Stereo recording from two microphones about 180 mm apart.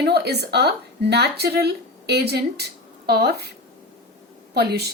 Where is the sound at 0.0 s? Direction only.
65° right (ahead or behind).